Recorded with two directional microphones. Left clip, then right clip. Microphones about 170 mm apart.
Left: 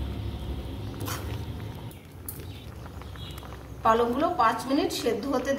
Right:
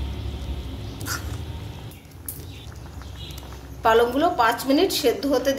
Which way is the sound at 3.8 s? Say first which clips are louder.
Right 5 dB; 65° right (ahead or behind).